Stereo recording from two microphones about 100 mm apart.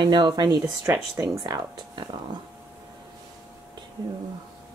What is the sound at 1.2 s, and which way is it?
Speech, 40° right (ahead or behind).